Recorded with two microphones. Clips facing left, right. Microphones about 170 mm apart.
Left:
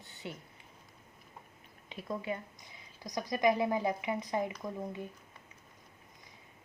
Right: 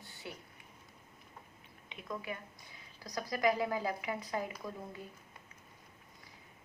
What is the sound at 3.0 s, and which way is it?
A woman's voice, 15° left (ahead or behind).